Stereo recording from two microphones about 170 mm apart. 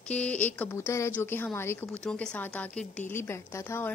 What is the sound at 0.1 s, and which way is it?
A woman's voice, 10° left (ahead or behind).